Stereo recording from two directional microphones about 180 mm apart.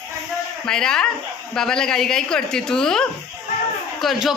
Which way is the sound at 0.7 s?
5° left (ahead or behind).